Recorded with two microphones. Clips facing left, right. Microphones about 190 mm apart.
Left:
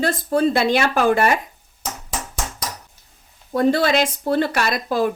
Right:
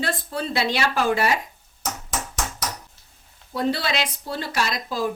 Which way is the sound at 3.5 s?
50° left (ahead or behind).